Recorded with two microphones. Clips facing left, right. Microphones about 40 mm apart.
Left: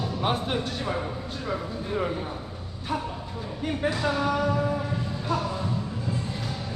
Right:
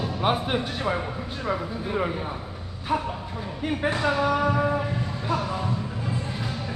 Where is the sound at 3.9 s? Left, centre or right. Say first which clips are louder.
Right 3 dB; right.